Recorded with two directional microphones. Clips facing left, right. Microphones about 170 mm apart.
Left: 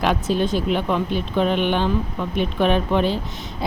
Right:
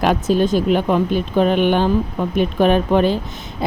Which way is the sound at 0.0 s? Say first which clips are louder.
Right 4 dB; 45° right (ahead or behind).